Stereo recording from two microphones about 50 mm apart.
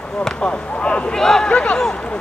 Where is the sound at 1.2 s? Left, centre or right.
Centre.